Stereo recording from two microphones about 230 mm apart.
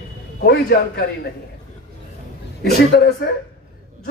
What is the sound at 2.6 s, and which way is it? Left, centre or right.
Speech, left.